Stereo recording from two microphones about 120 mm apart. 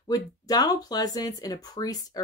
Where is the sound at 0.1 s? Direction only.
35° left (ahead or behind).